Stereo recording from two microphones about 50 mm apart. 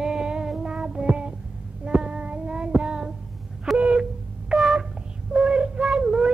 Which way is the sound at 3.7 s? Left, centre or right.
Right.